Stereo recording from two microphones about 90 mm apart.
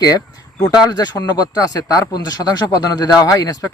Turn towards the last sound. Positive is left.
turn(degrees=40)  # may be behind; listen again after turning